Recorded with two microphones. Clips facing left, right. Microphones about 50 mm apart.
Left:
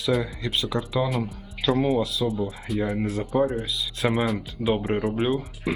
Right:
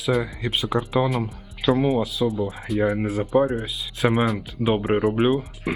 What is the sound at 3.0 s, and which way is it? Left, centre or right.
Speech, centre.